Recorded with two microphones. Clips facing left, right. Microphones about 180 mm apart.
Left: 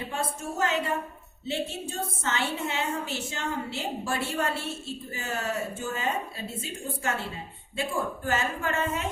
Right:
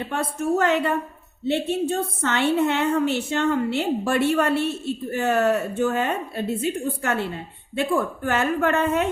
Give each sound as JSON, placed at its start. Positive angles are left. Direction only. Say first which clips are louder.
{"t": 0.1, "sound": "a woman's voice", "louder": "right 13 dB", "side_deg": -60}